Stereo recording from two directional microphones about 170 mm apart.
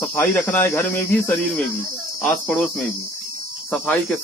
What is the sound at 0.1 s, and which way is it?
Speech, 15° left (ahead or behind).